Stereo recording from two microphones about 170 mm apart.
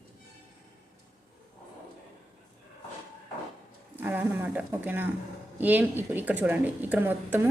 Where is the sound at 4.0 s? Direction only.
10° right (ahead or behind).